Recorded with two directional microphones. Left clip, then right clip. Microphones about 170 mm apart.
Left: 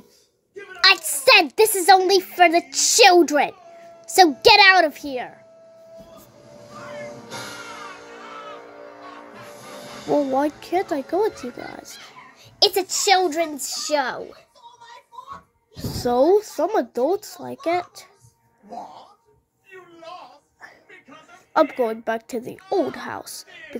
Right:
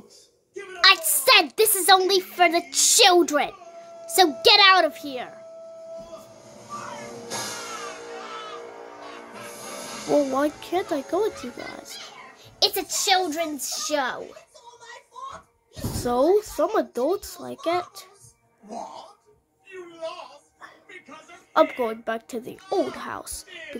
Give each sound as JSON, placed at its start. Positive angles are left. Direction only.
{"t": 0.7, "sound": "a woman's voice", "side_deg": 10}
{"t": 10.1, "sound": "speech", "side_deg": 0}
{"t": 12.5, "sound": "a child's voice", "side_deg": 30}
{"t": 15.8, "sound": "speech", "side_deg": 10}
{"t": 21.5, "sound": "speech", "side_deg": 10}